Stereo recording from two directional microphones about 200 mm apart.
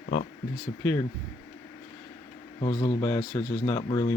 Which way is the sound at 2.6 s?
25° left (ahead or behind).